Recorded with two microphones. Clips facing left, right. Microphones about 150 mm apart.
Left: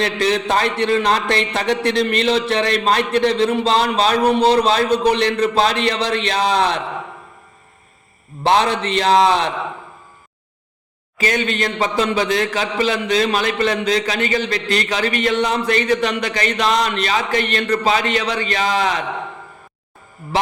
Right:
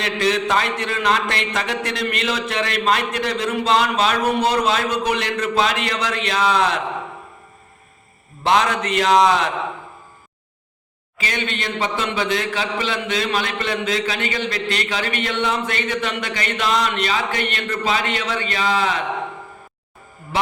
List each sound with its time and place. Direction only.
0.0 s a man's voice: 35° left (ahead or behind)
8.4 s a man's voice: 30° left (ahead or behind)
11.2 s a man's voice: 40° left (ahead or behind)